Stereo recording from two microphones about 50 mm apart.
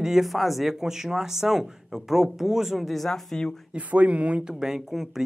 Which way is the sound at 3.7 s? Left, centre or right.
Right.